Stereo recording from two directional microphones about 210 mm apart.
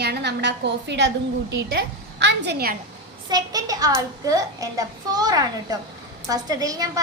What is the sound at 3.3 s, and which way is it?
A child's voice, 20° right (ahead or behind).